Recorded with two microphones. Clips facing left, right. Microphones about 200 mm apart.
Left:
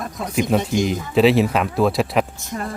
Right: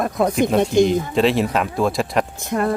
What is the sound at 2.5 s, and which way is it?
Speech, 60° right (ahead or behind).